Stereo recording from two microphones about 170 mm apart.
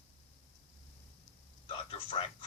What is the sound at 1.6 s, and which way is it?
Speech, 35° left (ahead or behind).